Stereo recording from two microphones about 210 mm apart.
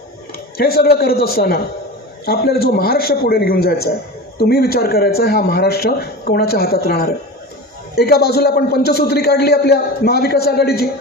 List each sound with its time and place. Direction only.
0.5 s a man's voice: 45° left (ahead or behind)